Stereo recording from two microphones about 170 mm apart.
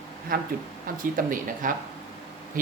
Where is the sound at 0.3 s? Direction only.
60° right (ahead or behind).